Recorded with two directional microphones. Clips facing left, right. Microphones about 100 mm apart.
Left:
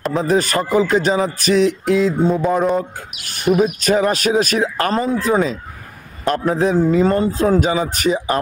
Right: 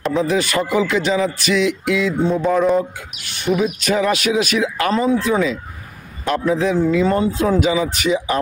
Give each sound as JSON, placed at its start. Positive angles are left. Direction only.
{"t": 0.1, "sound": "speech", "side_deg": 40}